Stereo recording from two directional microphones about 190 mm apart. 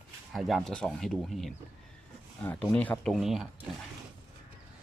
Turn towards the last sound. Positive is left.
turn(degrees=0)  # may be behind; listen again after turning